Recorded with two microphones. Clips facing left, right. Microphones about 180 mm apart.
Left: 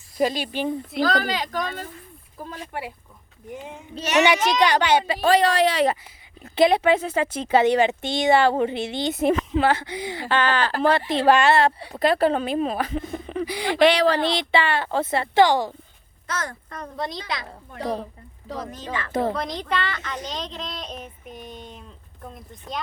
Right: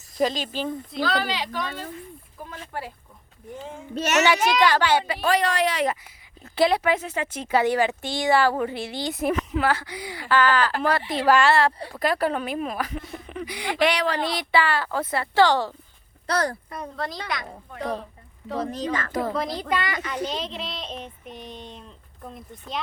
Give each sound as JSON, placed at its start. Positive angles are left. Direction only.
{"t": 0.2, "sound": "speech", "side_deg": 10}
{"t": 1.0, "sound": "speech", "side_deg": 45}
{"t": 3.5, "sound": "speech", "side_deg": 20}
{"t": 16.2, "sound": "speech", "side_deg": -35}
{"t": 16.6, "sound": "speech", "side_deg": -10}
{"t": 17.2, "sound": "speech", "side_deg": 30}
{"t": 18.6, "sound": "speech", "side_deg": -35}
{"t": 19.3, "sound": "speech", "side_deg": -5}
{"t": 20.3, "sound": "child singing", "side_deg": -5}